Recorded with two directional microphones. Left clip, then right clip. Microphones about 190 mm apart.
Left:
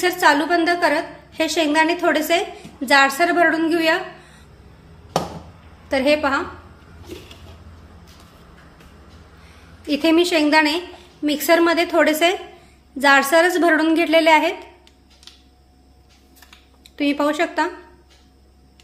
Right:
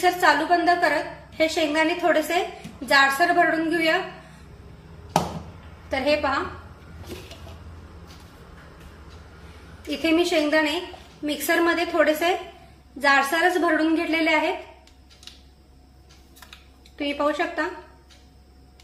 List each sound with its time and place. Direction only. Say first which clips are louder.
0.0 s a woman's voice: left 3 dB; 65° left (ahead or behind)
5.9 s a woman's voice: left 5 dB; 65° left (ahead or behind)
9.8 s a woman's voice: left 5 dB; 65° left (ahead or behind)
16.9 s a woman's voice: left 4 dB; 65° left (ahead or behind)